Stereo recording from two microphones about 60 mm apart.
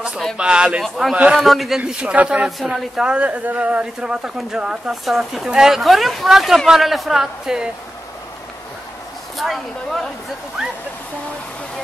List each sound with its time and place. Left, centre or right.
0.4 s a man's voice: centre
1.3 s a woman's voice: centre
1.9 s a man's voice: centre
3.8 s a man's voice: centre
5.0 s a woman's voice: centre
9.4 s a woman's voice: centre